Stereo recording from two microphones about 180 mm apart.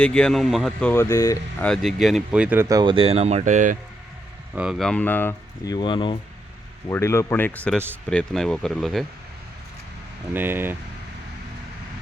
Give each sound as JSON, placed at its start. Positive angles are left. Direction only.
{"t": 0.0, "sound": "speech", "side_deg": 5}
{"t": 1.0, "sound": "speech", "side_deg": 20}
{"t": 1.6, "sound": "speech", "side_deg": 0}
{"t": 4.5, "sound": "speech", "side_deg": -5}
{"t": 6.8, "sound": "speech", "side_deg": 15}
{"t": 10.3, "sound": "speech", "side_deg": -10}